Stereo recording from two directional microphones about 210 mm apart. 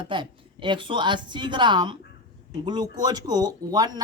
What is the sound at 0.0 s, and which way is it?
Speech, 25° right (ahead or behind).